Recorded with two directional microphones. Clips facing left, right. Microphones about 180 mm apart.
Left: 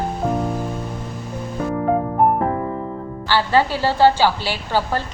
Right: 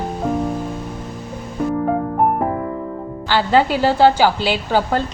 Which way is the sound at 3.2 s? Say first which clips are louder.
Right 2 dB; 15° right (ahead or behind).